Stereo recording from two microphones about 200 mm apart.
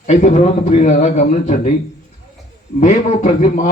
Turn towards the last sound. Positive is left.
turn(degrees=40)  # may be behind; listen again after turning